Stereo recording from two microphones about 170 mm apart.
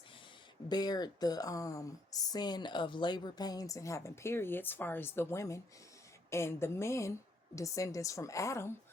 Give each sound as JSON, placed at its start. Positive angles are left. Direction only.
{"t": 0.7, "sound": "a woman's voice", "side_deg": 25}